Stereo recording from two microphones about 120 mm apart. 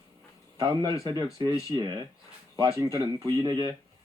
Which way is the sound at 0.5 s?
35° right (ahead or behind).